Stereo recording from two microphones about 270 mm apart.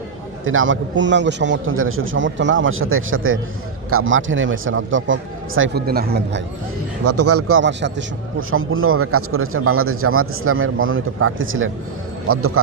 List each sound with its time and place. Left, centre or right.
0.4 s a man's voice: right
7.0 s a man's voice: right